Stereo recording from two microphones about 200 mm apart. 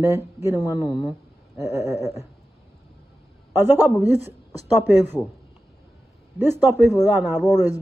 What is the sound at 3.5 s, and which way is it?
A woman's voice, 10° right (ahead or behind).